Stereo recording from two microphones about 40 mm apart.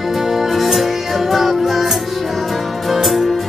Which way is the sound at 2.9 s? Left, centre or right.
Centre.